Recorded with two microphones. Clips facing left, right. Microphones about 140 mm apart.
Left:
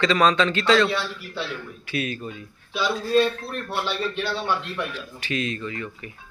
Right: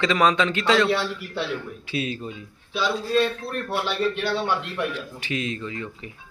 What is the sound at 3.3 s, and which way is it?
A man's voice, 10° right (ahead or behind).